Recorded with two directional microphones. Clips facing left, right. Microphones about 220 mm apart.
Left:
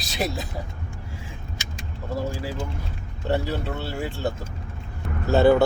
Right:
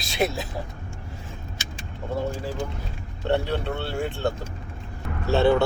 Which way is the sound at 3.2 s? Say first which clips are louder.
Right 1 dB; 5° left (ahead or behind).